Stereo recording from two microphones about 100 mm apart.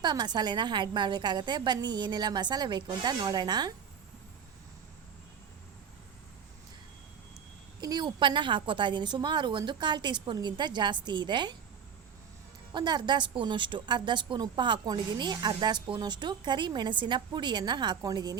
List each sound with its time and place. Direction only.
0.0 s a woman's voice: 45° right (ahead or behind)
7.8 s a woman's voice: 45° right (ahead or behind)
12.7 s a woman's voice: 50° right (ahead or behind)